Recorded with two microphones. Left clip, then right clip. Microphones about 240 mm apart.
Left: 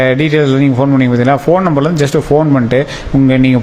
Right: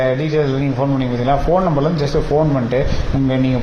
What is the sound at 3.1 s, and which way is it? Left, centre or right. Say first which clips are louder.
Speech: left 9 dB; left.